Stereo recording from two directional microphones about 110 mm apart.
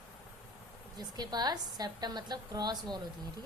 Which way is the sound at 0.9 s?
40° right (ahead or behind).